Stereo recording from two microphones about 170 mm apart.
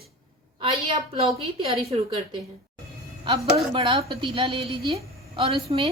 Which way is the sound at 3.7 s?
35° right (ahead or behind).